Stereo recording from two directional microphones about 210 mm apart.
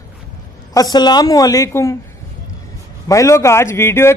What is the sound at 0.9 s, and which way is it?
A man's voice, 20° left (ahead or behind).